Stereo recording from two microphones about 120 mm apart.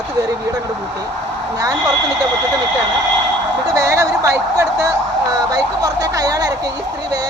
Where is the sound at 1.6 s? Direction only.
30° right (ahead or behind).